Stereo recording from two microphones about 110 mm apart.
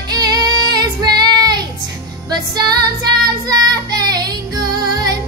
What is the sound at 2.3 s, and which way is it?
Music, 40° right (ahead or behind).